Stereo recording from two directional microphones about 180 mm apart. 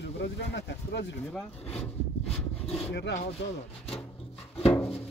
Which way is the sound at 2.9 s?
70° left (ahead or behind).